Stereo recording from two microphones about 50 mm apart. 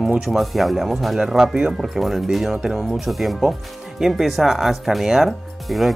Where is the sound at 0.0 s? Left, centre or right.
Centre.